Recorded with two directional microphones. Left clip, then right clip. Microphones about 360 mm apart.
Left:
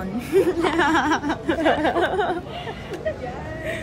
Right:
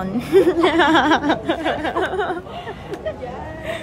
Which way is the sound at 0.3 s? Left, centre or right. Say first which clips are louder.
Right 5 dB; centre.